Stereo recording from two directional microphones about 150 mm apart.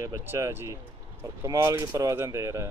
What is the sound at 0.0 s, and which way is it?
Speech, 15° right (ahead or behind).